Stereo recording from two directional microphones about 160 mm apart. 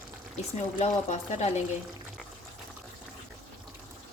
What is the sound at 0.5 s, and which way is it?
Speech, 45° left (ahead or behind).